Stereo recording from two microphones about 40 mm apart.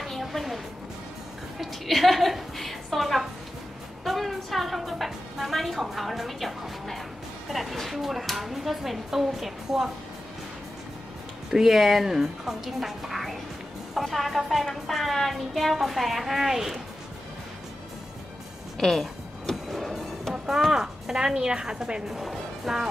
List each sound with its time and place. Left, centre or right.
0.0 s music: centre
1.6 s a woman's voice: centre
11.5 s a woman's voice: centre
18.8 s music: centre
19.5 s music: centre
20.7 s speech: centre
22.0 s speech: centre